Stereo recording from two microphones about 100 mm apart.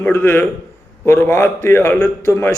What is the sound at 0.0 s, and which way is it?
Speech, 20° left (ahead or behind).